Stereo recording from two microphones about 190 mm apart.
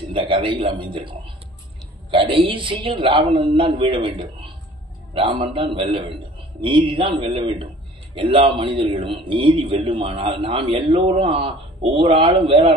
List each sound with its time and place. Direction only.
0.0 s a man's voice: 25° right (ahead or behind)